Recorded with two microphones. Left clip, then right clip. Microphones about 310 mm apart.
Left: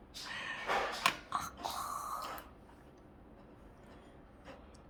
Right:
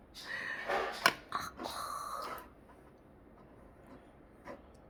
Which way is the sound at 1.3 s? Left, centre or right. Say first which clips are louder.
Left 1 dB; left.